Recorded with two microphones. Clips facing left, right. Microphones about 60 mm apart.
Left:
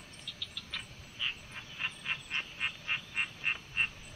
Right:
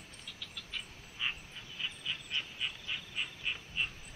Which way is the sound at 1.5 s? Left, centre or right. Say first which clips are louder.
Left 2 dB; left.